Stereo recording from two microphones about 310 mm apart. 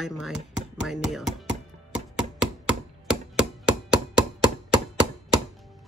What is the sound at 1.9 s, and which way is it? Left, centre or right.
Chopping, centre.